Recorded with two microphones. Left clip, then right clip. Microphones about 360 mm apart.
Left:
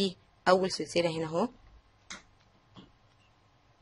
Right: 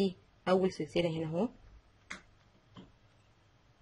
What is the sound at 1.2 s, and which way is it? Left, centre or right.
Speech, left.